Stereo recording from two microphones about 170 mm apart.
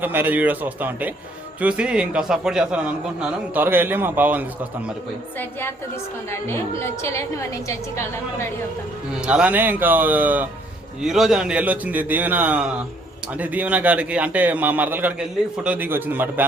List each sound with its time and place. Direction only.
0.0 s a man's voice: 10° right (ahead or behind)
5.4 s a woman's voice: 10° left (ahead or behind)
9.2 s a man's voice: 5° right (ahead or behind)